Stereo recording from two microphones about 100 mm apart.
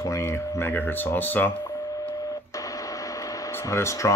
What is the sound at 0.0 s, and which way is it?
Speech, 30° left (ahead or behind).